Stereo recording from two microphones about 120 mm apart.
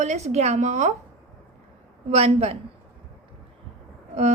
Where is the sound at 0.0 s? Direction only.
70° right (ahead or behind).